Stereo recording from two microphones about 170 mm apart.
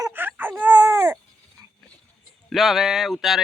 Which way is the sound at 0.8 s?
20° right (ahead or behind).